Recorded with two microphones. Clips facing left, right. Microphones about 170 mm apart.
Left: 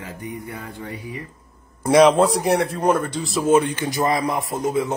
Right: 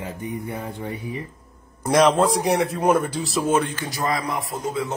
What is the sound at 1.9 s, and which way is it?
A man's voice, 10° left (ahead or behind).